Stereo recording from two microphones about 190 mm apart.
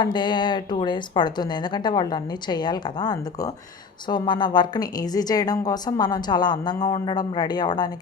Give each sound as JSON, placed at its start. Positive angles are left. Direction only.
{"t": 0.0, "sound": "a woman's voice", "side_deg": 25}